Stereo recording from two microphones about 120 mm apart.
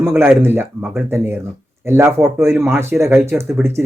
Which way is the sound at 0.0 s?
20° right (ahead or behind).